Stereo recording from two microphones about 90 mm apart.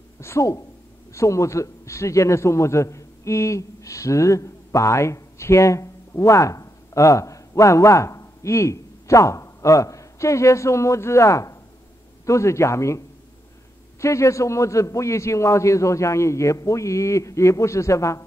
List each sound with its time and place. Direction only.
0.2 s a man's voice: 35° left (ahead or behind)
14.0 s a man's voice: 35° left (ahead or behind)